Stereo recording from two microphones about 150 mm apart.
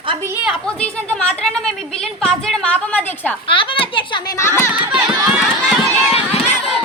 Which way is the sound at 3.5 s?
35° left (ahead or behind).